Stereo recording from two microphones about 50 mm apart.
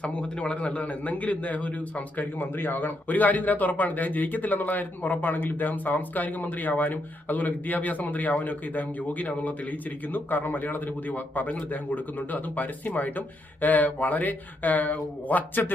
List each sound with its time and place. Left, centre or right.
0.0 s a man's voice: left